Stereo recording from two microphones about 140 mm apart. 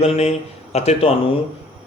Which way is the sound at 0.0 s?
50° left (ahead or behind).